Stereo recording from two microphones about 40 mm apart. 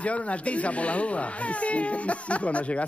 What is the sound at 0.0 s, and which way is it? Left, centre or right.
Speech, left.